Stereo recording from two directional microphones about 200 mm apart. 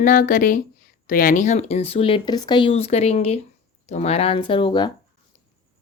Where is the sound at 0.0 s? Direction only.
40° left (ahead or behind); by 4.9 s 25° left (ahead or behind).